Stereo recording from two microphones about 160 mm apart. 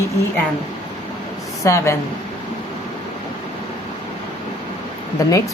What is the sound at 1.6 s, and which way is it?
Speech, 20° left (ahead or behind).